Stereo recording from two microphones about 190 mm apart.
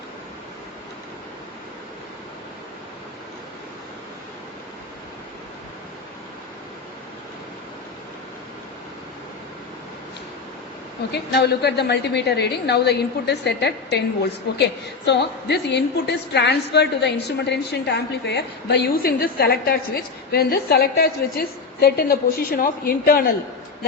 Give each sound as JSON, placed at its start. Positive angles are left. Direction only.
{"t": 11.1, "sound": "a woman's voice", "side_deg": 60}
{"t": 15.0, "sound": "a woman's voice", "side_deg": 65}